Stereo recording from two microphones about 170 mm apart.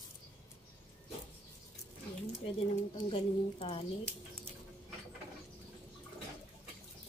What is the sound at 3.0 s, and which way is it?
Speech, 30° left (ahead or behind).